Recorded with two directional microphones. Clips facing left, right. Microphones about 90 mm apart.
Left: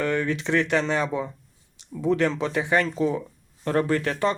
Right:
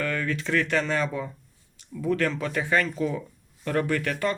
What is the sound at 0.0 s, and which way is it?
Speech, 20° left (ahead or behind).